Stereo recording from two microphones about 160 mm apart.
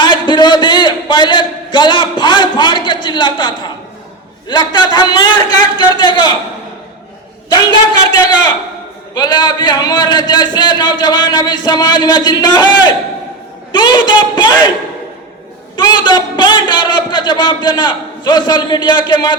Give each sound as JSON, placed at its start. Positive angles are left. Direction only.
{"t": 0.0, "sound": "a sound", "side_deg": 30}
{"t": 4.4, "sound": "a man's voice", "side_deg": 30}
{"t": 7.5, "sound": "a man's voice", "side_deg": 25}
{"t": 15.7, "sound": "a man's voice", "side_deg": 30}